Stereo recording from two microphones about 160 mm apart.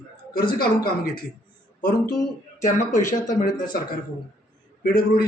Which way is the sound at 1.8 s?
60° left (ahead or behind).